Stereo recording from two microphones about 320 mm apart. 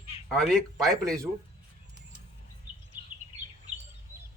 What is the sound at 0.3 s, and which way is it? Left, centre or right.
Speech, centre.